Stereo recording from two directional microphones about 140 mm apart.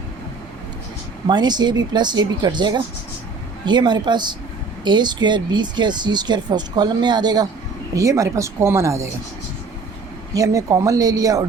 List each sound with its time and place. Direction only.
1.3 s speech: 30° right (ahead or behind)
10.3 s speech: 25° right (ahead or behind)